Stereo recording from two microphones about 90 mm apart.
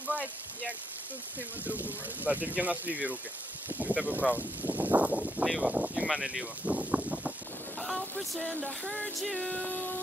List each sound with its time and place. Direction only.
1.6 s speech: 20° right (ahead or behind)
9.2 s music: 5° left (ahead or behind)
9.6 s a sound: 20° left (ahead or behind)